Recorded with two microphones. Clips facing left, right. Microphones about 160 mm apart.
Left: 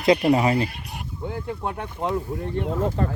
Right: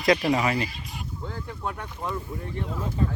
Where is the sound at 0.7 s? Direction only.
65° left (ahead or behind).